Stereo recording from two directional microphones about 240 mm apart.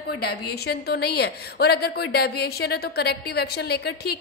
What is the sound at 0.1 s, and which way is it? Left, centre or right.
A woman's voice, left.